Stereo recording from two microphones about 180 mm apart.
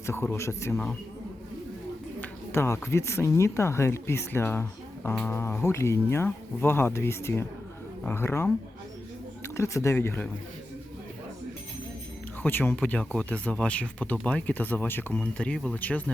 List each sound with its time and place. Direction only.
0.0 s speech: 15° left (ahead or behind)
0.7 s a man's voice: 5° left (ahead or behind)
2.2 s speech: 15° left (ahead or behind)
9.6 s speech: 15° left (ahead or behind)
12.4 s speech: 10° left (ahead or behind)